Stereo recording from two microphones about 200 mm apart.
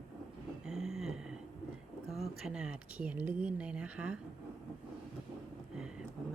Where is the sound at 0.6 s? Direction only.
5° right (ahead or behind).